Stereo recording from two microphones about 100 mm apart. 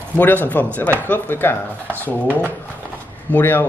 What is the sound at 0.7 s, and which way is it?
Speech, 20° left (ahead or behind).